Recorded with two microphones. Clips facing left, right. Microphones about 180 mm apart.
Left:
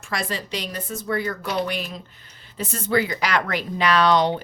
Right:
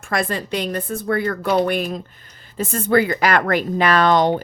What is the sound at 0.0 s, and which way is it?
Speech, 55° right (ahead or behind).